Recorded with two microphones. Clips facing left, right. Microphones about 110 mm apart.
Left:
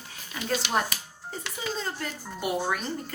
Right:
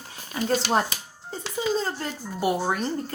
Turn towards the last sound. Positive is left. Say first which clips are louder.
# right 4 dB
turn(degrees=-30)  # may be behind; listen again after turning